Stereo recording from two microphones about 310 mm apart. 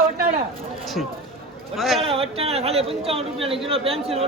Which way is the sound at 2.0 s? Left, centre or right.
Centre.